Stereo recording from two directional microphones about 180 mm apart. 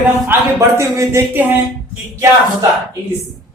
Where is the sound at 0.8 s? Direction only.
15° right (ahead or behind).